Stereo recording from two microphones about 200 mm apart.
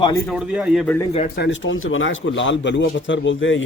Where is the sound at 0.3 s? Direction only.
5° right (ahead or behind).